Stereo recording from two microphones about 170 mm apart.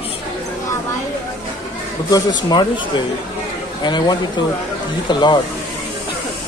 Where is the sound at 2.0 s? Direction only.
25° left (ahead or behind).